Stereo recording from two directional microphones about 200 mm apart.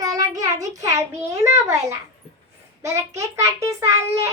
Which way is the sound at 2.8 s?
15° right (ahead or behind).